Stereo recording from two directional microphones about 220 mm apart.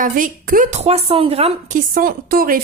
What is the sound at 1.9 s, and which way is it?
Speech, 40° right (ahead or behind).